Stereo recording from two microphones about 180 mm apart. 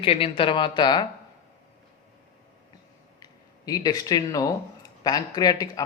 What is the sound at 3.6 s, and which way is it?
A man's voice, 20° left (ahead or behind).